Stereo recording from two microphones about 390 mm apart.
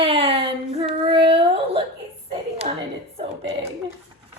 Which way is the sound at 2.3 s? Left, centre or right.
Centre.